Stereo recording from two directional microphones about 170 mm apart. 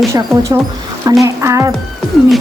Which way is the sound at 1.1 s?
20° right (ahead or behind).